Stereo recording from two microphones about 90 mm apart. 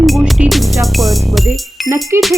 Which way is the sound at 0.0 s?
5° right (ahead or behind).